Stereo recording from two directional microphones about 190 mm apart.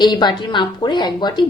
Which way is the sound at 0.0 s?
25° left (ahead or behind).